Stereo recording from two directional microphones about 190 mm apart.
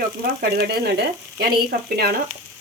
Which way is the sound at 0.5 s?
55° right (ahead or behind).